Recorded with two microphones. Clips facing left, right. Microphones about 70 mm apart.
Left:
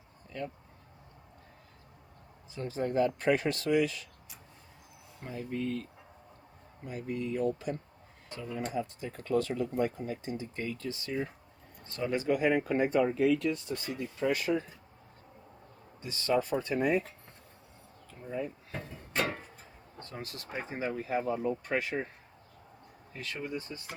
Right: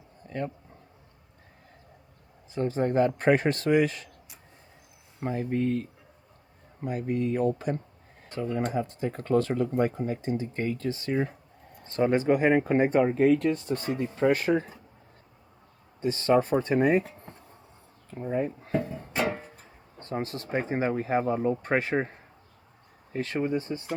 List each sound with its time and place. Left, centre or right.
0.3 s speech: right
2.6 s speech: right
5.3 s speech: right
6.8 s speech: right
16.0 s speech: right
18.7 s speech: right
19.1 s music: centre
20.0 s speech: right
23.1 s speech: right